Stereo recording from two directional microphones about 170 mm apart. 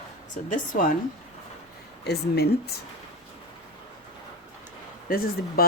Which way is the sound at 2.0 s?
70° left (ahead or behind).